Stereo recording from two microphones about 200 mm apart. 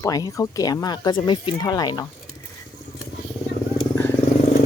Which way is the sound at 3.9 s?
10° left (ahead or behind).